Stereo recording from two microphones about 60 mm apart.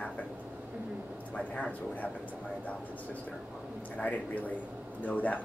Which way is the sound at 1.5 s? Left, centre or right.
Left.